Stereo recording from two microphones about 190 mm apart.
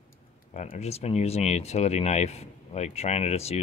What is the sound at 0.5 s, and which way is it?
Speech, 35° left (ahead or behind).